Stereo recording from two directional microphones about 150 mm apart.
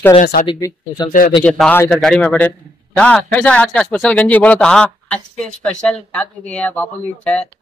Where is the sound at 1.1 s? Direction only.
60° left (ahead or behind).